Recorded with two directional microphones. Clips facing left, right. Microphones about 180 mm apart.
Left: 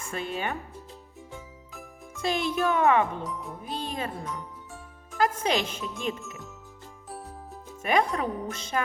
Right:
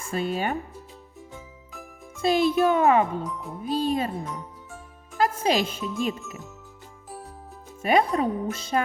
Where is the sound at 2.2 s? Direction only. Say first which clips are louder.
Right 6 dB; 30° right (ahead or behind).